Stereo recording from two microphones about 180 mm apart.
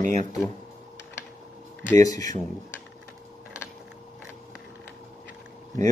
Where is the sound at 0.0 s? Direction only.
45° right (ahead or behind).